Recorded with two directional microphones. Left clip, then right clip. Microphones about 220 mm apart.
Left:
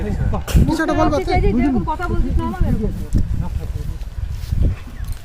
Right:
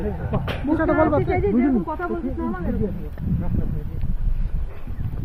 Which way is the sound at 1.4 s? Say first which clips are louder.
Left 1 dB; 40° left (ahead or behind).